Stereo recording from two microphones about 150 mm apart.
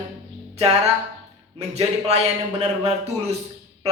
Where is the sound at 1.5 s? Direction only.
45° right (ahead or behind).